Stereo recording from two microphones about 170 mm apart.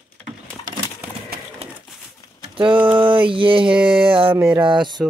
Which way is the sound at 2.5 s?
30° right (ahead or behind).